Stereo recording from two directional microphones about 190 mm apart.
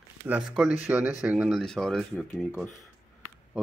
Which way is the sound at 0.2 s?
5° right (ahead or behind).